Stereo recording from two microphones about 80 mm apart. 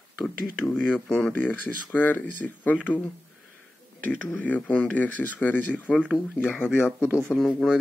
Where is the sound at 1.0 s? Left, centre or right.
Centre.